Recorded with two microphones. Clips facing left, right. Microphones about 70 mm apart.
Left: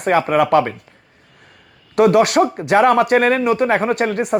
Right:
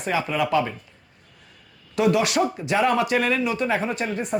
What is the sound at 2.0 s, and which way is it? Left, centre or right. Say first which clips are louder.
Speech: left 8 dB; left.